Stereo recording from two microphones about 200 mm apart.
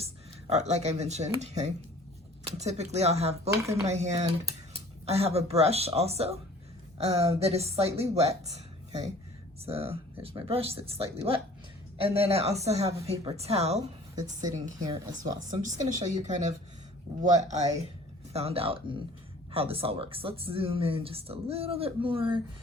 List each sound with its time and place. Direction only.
0.0 s a woman's voice: 30° right (ahead or behind)
14.4 s speech: 20° right (ahead or behind)
15.4 s a woman's voice: 40° right (ahead or behind)
18.3 s speech: 30° right (ahead or behind)